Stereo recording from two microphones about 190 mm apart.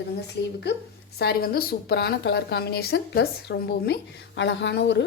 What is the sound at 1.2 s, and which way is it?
A woman's voice, 55° left (ahead or behind).